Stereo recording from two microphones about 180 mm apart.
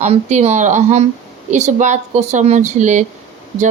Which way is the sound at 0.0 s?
40° right (ahead or behind).